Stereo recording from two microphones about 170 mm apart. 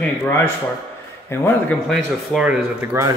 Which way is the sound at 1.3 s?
10° left (ahead or behind).